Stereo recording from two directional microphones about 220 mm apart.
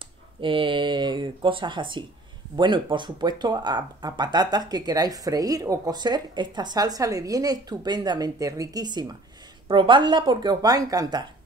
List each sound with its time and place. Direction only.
0.4 s speech: 20° right (ahead or behind)